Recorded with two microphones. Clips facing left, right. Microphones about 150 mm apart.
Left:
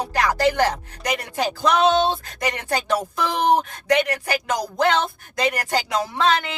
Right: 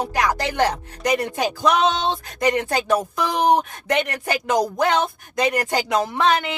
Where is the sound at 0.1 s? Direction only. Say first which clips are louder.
Left 2 dB; 20° right (ahead or behind).